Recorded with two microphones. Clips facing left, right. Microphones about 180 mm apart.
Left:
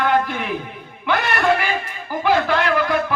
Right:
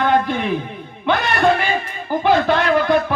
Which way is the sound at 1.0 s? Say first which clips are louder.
Right 2 dB; 25° right (ahead or behind).